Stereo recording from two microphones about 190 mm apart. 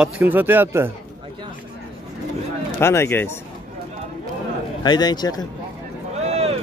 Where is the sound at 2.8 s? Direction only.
15° left (ahead or behind).